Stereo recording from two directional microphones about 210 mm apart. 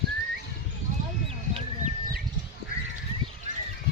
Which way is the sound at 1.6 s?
35° right (ahead or behind).